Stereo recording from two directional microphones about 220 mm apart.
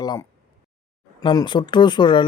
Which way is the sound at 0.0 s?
15° left (ahead or behind).